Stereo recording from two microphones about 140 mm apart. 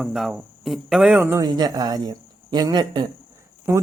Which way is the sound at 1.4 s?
30° right (ahead or behind).